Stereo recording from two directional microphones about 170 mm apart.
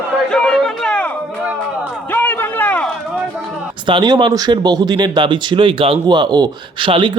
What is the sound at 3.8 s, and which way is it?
Speech, 25° right (ahead or behind).